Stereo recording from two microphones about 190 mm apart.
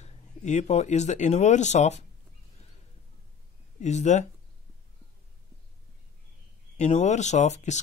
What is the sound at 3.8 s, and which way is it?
Speech, 35° left (ahead or behind).